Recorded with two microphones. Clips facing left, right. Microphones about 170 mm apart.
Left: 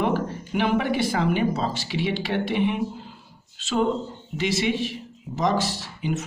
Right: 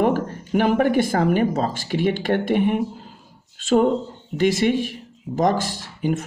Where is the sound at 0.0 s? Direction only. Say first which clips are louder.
Right 4 dB; 45° right (ahead or behind).